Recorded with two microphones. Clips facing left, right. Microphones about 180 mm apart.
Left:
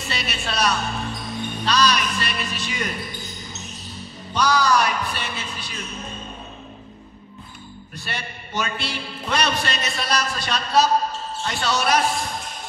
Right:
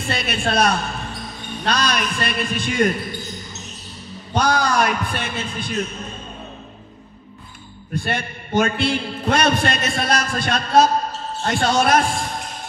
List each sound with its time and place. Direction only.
0.0 s a man's voice: 55° right (ahead or behind)
4.3 s a man's voice: 55° right (ahead or behind)
7.9 s a man's voice: 55° right (ahead or behind)